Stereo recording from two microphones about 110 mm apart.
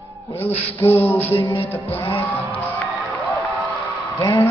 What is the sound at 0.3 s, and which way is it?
Music, 20° left (ahead or behind).